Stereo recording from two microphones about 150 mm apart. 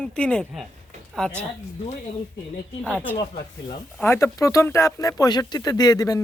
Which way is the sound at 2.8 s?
10° left (ahead or behind).